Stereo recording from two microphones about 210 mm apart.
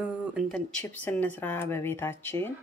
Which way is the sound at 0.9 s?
5° left (ahead or behind).